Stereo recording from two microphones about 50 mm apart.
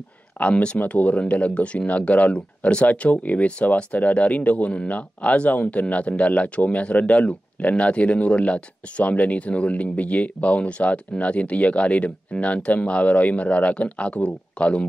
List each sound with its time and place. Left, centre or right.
0.4 s speech: left